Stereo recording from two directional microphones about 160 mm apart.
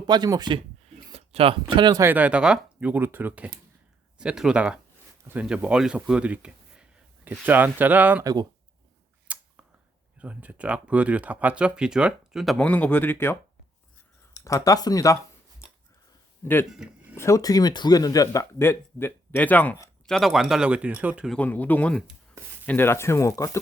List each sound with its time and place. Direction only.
0.1 s speech: 25° right (ahead or behind)
1.1 s speech: 40° right (ahead or behind)
2.0 s speech: 10° right (ahead or behind)
8.2 s speech: 25° right (ahead or behind)
9.2 s a sound: 10° right (ahead or behind)
10.2 s speech: 10° right (ahead or behind)
12.6 s speech: 10° left (ahead or behind)
14.4 s speech: 20° left (ahead or behind)
16.6 s speech: 5° right (ahead or behind)
17.2 s speech: 20° left (ahead or behind); by 21.2 s 10° right (ahead or behind)
21.2 s speech: 10° left (ahead or behind)